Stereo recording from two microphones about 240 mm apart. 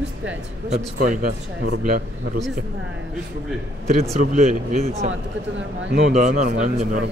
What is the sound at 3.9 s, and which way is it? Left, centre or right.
Speech, right.